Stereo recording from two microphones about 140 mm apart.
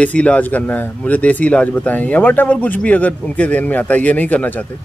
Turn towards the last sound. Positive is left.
turn(degrees=10)  # may be behind; listen again after turning